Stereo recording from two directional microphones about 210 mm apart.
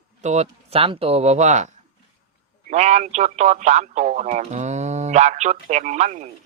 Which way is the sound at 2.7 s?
35° right (ahead or behind).